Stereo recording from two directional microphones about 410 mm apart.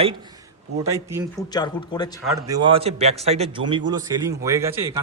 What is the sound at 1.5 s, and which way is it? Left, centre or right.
Speech, centre.